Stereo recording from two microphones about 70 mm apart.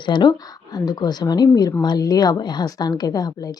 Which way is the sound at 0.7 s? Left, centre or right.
Left.